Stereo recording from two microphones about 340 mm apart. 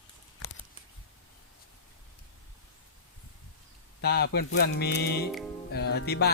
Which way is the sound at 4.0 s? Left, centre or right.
Left.